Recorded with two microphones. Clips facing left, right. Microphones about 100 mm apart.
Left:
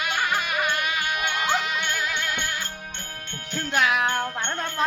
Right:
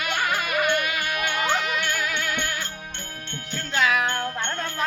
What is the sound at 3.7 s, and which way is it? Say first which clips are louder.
Music: even; 20° left (ahead or behind).